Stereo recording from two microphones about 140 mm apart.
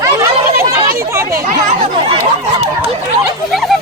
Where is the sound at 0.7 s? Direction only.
20° right (ahead or behind).